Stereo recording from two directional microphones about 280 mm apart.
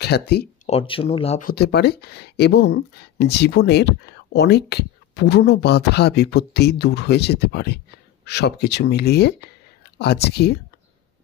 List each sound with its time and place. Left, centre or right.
0.0 s speech: left
0.7 s speech: centre
1.5 s speech: left